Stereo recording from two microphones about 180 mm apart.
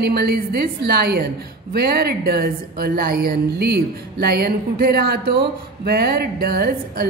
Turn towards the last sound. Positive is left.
turn(degrees=-60)  # may be behind; listen again after turning